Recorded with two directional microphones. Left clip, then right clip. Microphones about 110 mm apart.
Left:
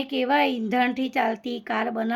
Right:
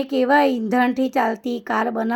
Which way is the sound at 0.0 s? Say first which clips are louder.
Right 5 dB; 35° right (ahead or behind).